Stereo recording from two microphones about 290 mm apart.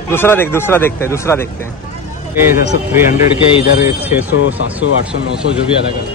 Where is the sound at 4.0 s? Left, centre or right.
Centre.